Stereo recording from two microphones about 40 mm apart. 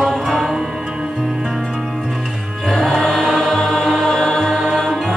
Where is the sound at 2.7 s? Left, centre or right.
Centre.